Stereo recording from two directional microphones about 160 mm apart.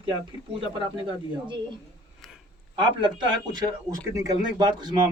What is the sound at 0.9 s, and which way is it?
Speech, 30° right (ahead or behind).